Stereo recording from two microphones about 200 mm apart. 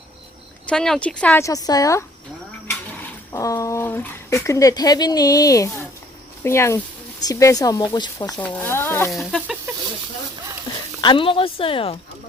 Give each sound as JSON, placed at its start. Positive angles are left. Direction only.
{"t": 0.7, "sound": "speech", "side_deg": 5}
{"t": 3.3, "sound": "speech", "side_deg": 15}
{"t": 8.4, "sound": "speech", "side_deg": 10}
{"t": 9.1, "sound": "speech", "side_deg": 0}
{"t": 11.0, "sound": "a woman's voice", "side_deg": 25}